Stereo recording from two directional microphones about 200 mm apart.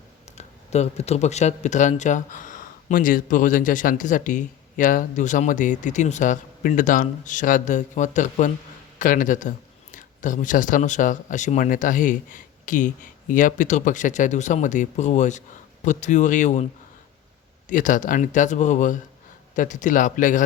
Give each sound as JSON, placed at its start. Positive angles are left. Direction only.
{"t": 0.3, "sound": "speech", "side_deg": 35}
{"t": 17.7, "sound": "speech", "side_deg": 40}